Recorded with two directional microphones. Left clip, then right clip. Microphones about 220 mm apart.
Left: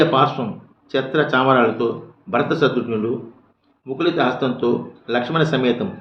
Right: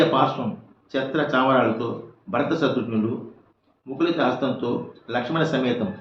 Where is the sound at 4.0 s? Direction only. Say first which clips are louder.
Left 3 dB; 50° left (ahead or behind).